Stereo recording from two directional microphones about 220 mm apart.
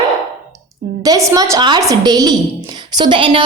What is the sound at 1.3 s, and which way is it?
A woman's voice, 15° right (ahead or behind).